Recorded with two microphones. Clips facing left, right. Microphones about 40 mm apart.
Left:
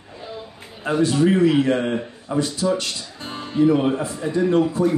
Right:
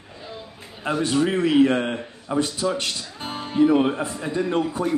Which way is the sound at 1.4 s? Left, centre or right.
Right.